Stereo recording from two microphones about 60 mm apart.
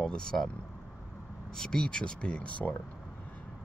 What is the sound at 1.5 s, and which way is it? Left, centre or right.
Speech, centre.